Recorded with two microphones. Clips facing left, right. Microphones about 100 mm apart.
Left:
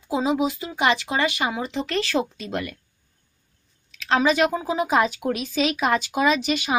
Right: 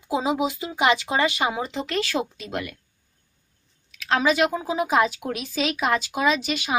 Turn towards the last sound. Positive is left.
turn(degrees=0)  # may be behind; listen again after turning